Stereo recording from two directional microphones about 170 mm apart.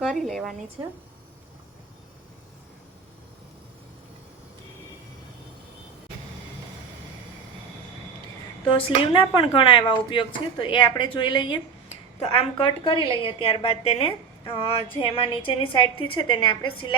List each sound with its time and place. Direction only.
0.0 s a sound: centre (ahead or behind)
0.8 s speech: 25° right (ahead or behind)
8.6 s speech: 30° left (ahead or behind)